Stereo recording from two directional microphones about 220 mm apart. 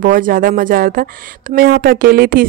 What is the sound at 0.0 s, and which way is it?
A woman's voice, 40° right (ahead or behind).